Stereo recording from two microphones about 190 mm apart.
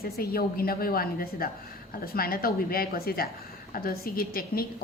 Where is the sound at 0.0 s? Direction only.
50° left (ahead or behind).